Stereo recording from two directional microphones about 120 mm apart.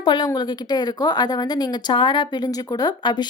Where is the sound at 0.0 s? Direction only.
40° left (ahead or behind).